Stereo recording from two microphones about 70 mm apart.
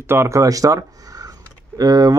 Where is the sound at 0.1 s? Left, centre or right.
Right.